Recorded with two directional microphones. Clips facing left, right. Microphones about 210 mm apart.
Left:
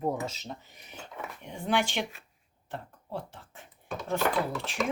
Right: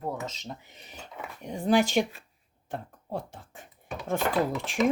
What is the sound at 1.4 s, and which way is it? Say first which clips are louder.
Speech: right 6 dB; 40° right (ahead or behind).